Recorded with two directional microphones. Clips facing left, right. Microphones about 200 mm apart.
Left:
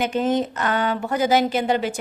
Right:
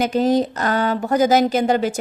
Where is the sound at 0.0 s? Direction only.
35° right (ahead or behind).